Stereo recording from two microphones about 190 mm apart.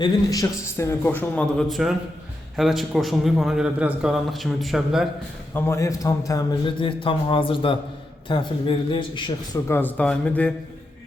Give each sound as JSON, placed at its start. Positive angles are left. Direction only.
{"t": 0.0, "sound": "a man's voice", "side_deg": 20}
{"t": 5.5, "sound": "a man's voice", "side_deg": 15}
{"t": 9.6, "sound": "a man's voice", "side_deg": 10}